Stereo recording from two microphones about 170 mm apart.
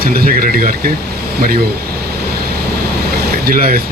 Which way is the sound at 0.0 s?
60° right (ahead or behind).